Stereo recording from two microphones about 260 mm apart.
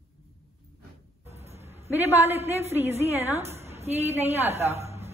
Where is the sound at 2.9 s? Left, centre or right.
Right.